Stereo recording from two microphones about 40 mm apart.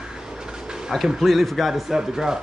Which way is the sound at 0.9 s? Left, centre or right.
Centre.